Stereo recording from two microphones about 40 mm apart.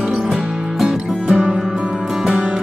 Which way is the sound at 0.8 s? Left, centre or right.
Centre.